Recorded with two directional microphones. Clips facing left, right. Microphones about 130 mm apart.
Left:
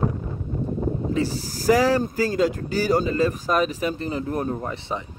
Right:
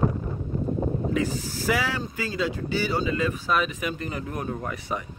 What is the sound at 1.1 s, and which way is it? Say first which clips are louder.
Speech: left 2 dB; 35° left (ahead or behind).